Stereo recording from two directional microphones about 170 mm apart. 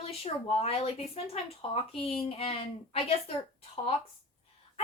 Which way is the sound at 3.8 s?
30° left (ahead or behind).